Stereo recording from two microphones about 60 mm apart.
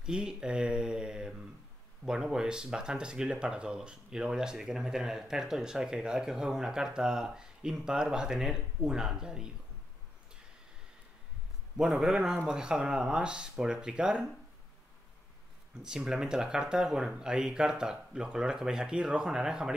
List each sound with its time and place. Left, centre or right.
0.0 s mantra: centre
2.0 s speech: centre
11.9 s speech: centre
15.8 s speech: centre